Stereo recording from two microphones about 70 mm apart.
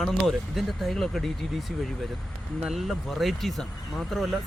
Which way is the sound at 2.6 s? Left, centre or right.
Centre.